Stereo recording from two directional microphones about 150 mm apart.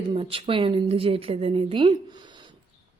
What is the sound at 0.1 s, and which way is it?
A woman's voice, 35° right (ahead or behind).